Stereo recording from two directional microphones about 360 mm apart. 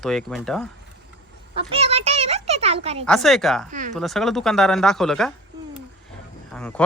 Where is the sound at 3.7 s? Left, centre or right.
Right.